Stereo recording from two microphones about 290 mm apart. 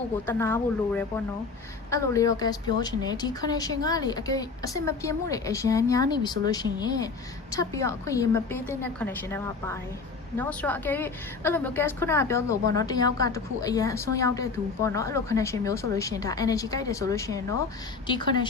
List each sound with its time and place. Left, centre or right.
0.3 s a woman's voice: centre